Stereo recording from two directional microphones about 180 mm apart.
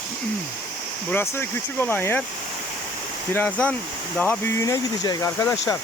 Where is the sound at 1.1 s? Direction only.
15° left (ahead or behind).